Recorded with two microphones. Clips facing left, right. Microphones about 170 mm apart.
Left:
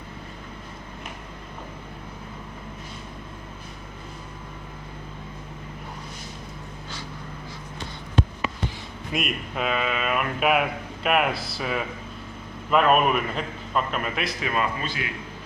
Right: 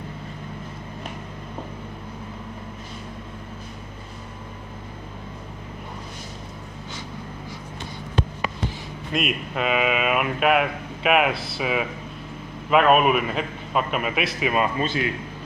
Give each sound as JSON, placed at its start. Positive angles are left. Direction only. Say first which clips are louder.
{"t": 9.1, "sound": "a man's voice", "louder": "right 3 dB", "side_deg": 0}
{"t": 14.8, "sound": "a man's voice", "louder": "right 7 dB", "side_deg": -30}